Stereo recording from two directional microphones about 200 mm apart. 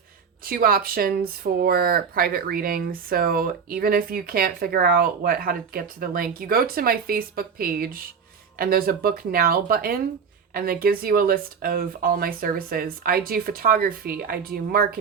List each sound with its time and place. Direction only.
0.4 s speech: 45° right (ahead or behind)